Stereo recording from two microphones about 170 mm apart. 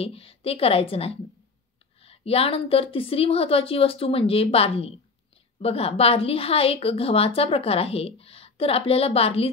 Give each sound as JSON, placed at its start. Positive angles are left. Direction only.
{"t": 0.0, "sound": "a woman's voice", "side_deg": 35}